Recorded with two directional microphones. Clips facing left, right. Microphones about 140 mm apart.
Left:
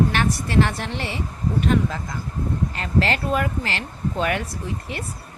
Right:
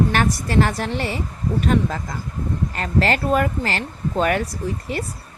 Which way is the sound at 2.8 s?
45° right (ahead or behind).